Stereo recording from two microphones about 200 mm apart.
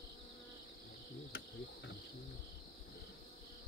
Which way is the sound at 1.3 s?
60° left (ahead or behind).